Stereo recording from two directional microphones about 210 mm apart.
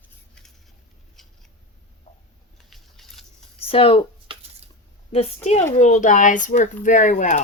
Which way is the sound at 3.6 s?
25° left (ahead or behind).